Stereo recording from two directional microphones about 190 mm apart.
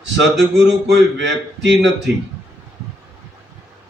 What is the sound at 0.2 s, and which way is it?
A man's voice, 70° right (ahead or behind).